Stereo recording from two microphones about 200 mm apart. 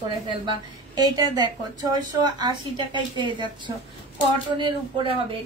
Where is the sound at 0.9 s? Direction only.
20° right (ahead or behind).